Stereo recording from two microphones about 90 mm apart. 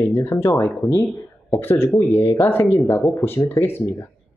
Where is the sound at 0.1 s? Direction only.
25° left (ahead or behind).